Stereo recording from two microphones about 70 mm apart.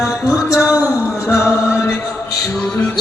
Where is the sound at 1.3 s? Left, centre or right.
Left.